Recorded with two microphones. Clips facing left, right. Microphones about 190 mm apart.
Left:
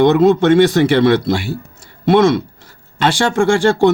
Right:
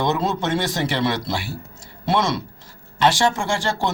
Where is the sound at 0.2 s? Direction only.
55° left (ahead or behind).